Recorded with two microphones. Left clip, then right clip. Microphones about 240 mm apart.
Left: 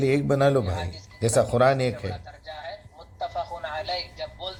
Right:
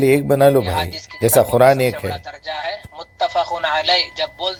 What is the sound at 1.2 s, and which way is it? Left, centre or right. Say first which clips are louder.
Speech: right 8 dB; right.